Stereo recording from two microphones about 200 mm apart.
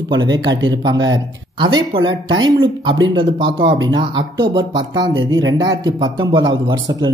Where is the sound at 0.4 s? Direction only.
70° right (ahead or behind).